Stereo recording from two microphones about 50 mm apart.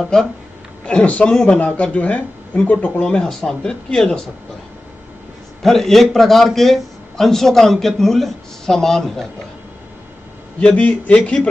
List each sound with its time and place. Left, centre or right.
1.0 s speech: left
3.2 s a man's voice: centre
5.6 s a man's voice: centre
10.6 s speech: left